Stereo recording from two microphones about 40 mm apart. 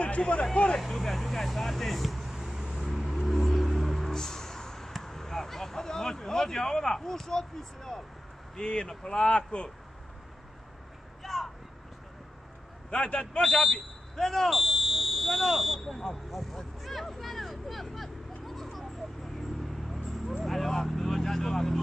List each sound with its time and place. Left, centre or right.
0.0 s speech: left
0.7 s speech: centre
2.8 s vehicle: centre
8.5 s speech: left
11.2 s vehicle: centre
12.9 s speech: left
13.4 s speech: centre
16.8 s a sound: centre
20.4 s vehicle: centre